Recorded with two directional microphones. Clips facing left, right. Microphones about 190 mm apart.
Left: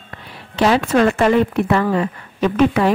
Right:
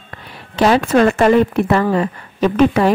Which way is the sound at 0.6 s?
40° right (ahead or behind).